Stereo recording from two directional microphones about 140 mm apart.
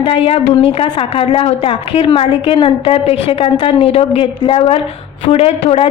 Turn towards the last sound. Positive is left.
turn(degrees=45)  # may be behind; listen again after turning